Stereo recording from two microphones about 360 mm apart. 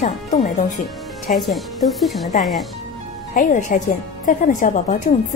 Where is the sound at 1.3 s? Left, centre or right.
Centre.